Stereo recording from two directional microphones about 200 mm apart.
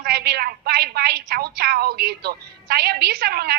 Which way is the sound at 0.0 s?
50° right (ahead or behind).